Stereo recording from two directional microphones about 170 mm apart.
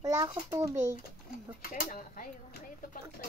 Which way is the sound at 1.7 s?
55° left (ahead or behind).